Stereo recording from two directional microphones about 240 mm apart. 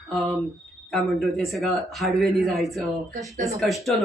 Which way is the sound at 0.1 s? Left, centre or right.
Centre.